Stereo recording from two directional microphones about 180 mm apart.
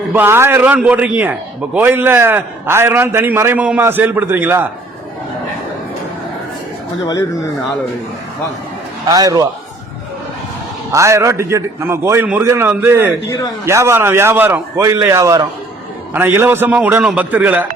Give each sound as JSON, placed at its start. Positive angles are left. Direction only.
{"t": 0.1, "sound": "a man's voice", "side_deg": -15}
{"t": 9.0, "sound": "a man's voice", "side_deg": -20}
{"t": 10.9, "sound": "a man's voice", "side_deg": -15}